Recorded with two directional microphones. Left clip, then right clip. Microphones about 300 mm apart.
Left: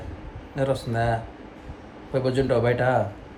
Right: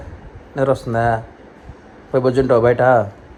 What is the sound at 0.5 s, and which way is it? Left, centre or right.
Speech, right.